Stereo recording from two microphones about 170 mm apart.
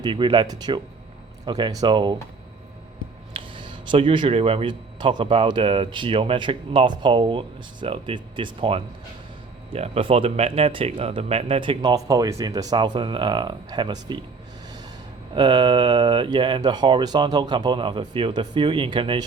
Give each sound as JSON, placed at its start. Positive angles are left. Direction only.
{"t": 0.0, "sound": "speech", "side_deg": -30}
{"t": 3.3, "sound": "speech", "side_deg": -30}
{"t": 15.4, "sound": "speech", "side_deg": -25}